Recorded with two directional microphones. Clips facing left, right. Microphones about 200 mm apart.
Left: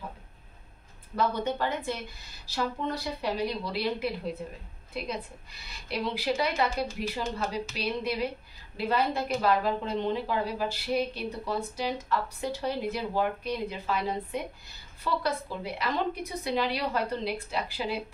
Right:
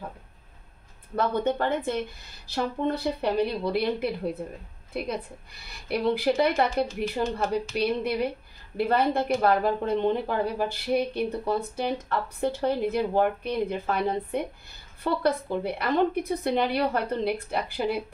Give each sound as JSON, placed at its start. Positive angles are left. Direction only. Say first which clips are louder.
{"t": 1.1, "sound": "speech", "louder": "right 3 dB", "side_deg": -55}